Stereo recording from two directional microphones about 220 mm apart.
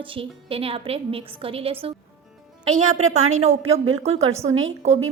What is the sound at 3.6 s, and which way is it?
Speech, 65° right (ahead or behind).